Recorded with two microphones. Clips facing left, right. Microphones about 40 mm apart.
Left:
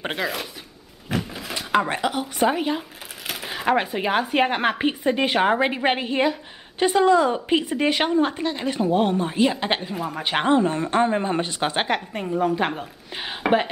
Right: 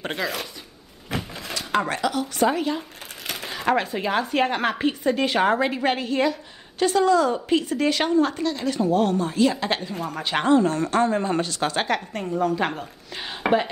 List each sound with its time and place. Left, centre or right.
0.1 s speech: centre
1.6 s a sound: centre
1.9 s speech: left
3.3 s speech: centre; by 9.8 s left
9.8 s speech: centre
10.2 s speech: left